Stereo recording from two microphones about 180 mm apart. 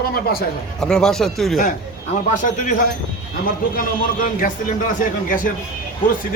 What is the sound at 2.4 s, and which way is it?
Speech, 45° left (ahead or behind).